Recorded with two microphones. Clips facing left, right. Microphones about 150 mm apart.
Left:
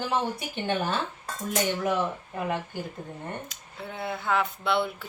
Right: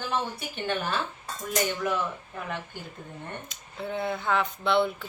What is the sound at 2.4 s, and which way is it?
Speech, 15° left (ahead or behind).